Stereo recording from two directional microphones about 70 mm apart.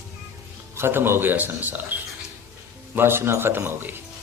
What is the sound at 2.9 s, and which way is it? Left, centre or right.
A man's voice, right.